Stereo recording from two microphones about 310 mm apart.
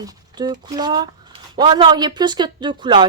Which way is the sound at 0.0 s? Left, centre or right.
Centre.